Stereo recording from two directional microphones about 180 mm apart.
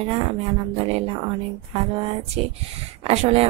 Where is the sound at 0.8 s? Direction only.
35° right (ahead or behind).